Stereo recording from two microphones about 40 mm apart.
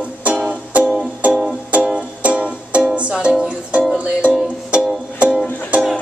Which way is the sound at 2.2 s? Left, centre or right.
Right.